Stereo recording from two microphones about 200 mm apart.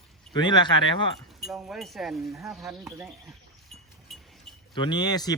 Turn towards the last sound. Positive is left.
turn(degrees=20)  # may be behind; listen again after turning